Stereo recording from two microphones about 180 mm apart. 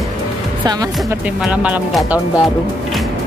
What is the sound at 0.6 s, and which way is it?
Speech, 20° right (ahead or behind).